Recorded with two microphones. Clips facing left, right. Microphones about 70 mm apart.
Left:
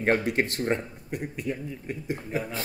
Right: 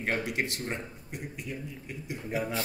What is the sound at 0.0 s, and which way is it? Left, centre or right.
A man's voice, left.